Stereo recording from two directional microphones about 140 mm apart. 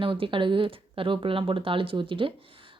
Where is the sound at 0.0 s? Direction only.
40° right (ahead or behind).